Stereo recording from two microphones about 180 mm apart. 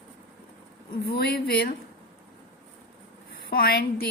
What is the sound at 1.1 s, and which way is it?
Speech, 60° left (ahead or behind).